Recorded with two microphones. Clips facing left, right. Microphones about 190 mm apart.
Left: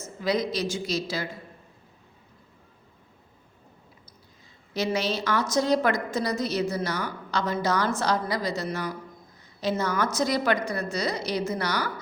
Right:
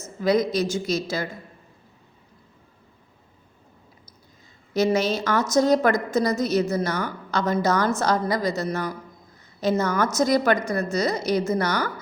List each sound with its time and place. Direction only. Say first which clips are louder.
0.2 s a woman's voice: right 5 dB; 50° right (ahead or behind)
4.7 s a woman's voice: right 6 dB; 45° right (ahead or behind)